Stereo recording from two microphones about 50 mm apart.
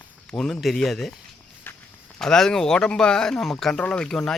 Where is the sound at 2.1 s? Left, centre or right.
Centre.